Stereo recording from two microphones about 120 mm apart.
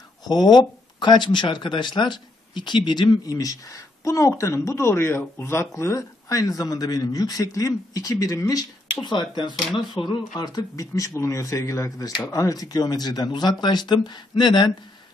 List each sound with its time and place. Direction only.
0.3 s speech: 35° left (ahead or behind)